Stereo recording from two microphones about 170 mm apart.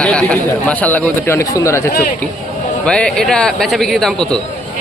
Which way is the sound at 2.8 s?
5° left (ahead or behind).